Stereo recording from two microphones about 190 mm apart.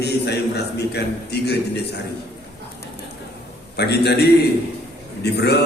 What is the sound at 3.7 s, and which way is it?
A man's voice, 60° left (ahead or behind).